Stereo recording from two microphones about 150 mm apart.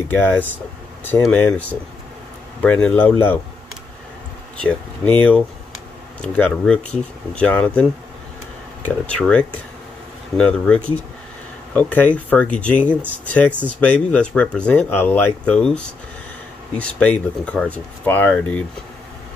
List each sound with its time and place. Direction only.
0.1 s speech: 15° left (ahead or behind)
6.2 s speech: 5° left (ahead or behind)
8.8 s speech: 5° left (ahead or behind)